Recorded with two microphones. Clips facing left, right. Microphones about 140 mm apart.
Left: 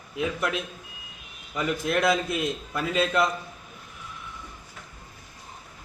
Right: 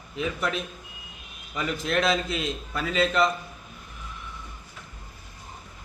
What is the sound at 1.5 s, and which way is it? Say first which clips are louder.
Speech: left 1 dB; 5° left (ahead or behind).